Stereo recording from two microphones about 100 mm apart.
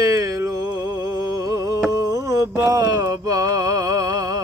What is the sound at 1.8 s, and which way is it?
Mantra, 30° right (ahead or behind).